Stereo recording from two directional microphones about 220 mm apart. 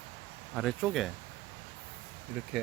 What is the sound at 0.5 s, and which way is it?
Speech, centre (ahead or behind).